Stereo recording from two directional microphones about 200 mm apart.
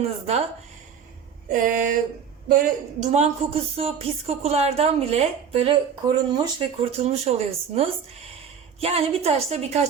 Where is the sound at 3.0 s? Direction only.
35° right (ahead or behind).